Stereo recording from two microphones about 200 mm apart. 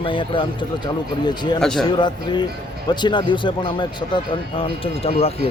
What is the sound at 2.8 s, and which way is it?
A man's voice, 20° left (ahead or behind).